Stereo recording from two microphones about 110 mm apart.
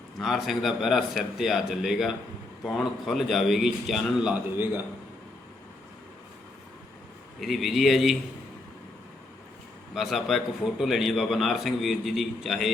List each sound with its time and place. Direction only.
0.2 s a man's voice: centre (ahead or behind)
4.5 s a man's voice: 20° right (ahead or behind)
7.3 s a man's voice: centre (ahead or behind)
9.9 s a man's voice: centre (ahead or behind)